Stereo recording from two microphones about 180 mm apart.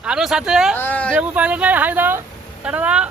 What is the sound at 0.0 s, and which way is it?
Speech, 5° right (ahead or behind).